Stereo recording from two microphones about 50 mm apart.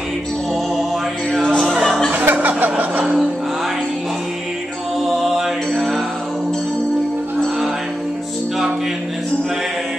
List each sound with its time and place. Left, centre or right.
1.8 s music: centre
2.1 s chuckle: right
5.0 s mantra: centre